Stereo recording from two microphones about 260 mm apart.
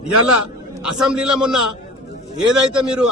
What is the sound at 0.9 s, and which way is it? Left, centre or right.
Speech, centre.